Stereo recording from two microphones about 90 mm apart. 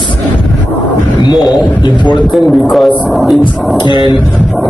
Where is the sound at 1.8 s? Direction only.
60° left (ahead or behind).